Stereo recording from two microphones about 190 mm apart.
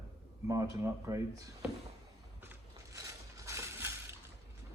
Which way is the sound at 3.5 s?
15° right (ahead or behind).